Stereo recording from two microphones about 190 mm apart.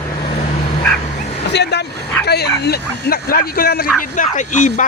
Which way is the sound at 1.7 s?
60° left (ahead or behind).